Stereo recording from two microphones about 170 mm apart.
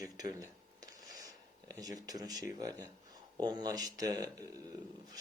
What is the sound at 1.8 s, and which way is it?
Speech, 20° right (ahead or behind).